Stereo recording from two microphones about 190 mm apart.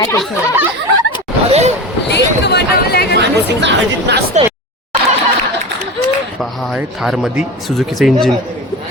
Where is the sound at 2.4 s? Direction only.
60° left (ahead or behind).